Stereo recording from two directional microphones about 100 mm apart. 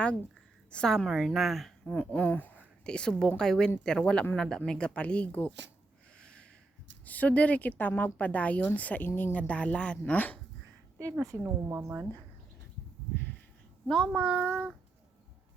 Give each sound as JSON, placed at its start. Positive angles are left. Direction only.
{"t": 0.7, "sound": "a woman's voice", "side_deg": 5}
{"t": 6.1, "sound": "a sound", "side_deg": 10}
{"t": 7.0, "sound": "speech", "side_deg": 15}
{"t": 11.2, "sound": "speech", "side_deg": -30}
{"t": 13.8, "sound": "a woman's voice", "side_deg": 5}